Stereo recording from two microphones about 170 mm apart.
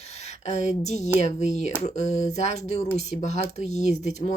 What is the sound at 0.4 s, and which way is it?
Speech, 40° left (ahead or behind).